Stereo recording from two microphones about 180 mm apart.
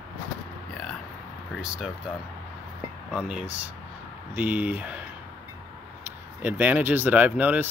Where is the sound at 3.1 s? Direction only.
5° right (ahead or behind).